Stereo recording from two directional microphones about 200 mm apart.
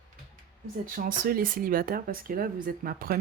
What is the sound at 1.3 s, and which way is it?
Speech, 45° right (ahead or behind).